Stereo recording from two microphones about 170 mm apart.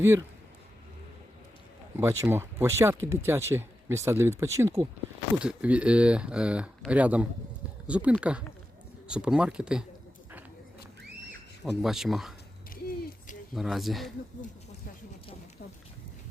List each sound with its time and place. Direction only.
0.0 s speech: 15° right (ahead or behind)
2.0 s speech: 15° right (ahead or behind)
11.6 s speech: centre (ahead or behind)
12.7 s a sound: 55° left (ahead or behind)
13.5 s speech: centre (ahead or behind)